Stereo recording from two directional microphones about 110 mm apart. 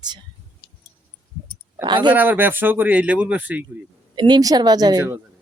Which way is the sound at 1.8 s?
45° right (ahead or behind).